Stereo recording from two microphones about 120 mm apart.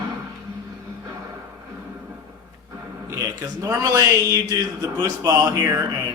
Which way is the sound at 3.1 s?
25° right (ahead or behind).